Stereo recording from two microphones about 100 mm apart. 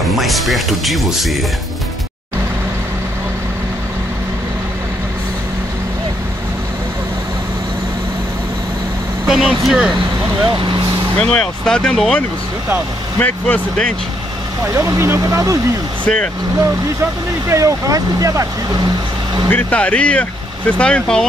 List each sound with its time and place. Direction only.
0.0 s speech: centre (ahead or behind)
9.3 s speech: 5° right (ahead or behind)
11.1 s speech: 10° left (ahead or behind)
14.7 s speech: 30° right (ahead or behind)
19.5 s speech: 10° left (ahead or behind)